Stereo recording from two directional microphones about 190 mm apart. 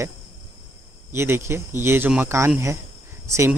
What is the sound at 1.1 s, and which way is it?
Speech, 15° right (ahead or behind).